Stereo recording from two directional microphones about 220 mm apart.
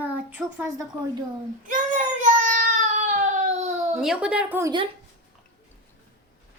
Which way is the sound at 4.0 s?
5° right (ahead or behind).